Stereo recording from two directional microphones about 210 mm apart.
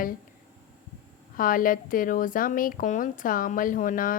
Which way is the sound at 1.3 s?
40° left (ahead or behind).